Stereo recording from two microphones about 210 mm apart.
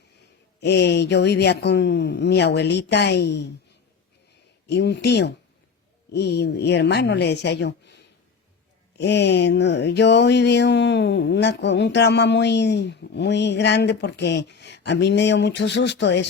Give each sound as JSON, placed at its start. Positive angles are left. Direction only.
{"t": 0.6, "sound": "speech", "side_deg": 55}
{"t": 4.6, "sound": "speech", "side_deg": 55}
{"t": 9.0, "sound": "a sound", "side_deg": 55}